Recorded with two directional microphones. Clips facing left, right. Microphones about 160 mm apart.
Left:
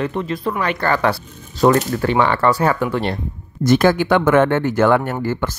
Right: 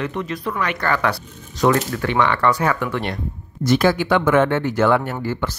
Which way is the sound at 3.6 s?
50° left (ahead or behind).